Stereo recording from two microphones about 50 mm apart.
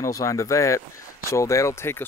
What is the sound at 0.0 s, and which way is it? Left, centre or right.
Speech, left.